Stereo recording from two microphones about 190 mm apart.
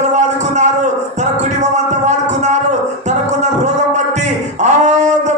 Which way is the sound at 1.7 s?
35° right (ahead or behind).